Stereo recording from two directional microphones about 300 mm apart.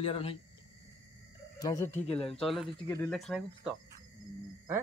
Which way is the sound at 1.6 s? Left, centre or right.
Centre.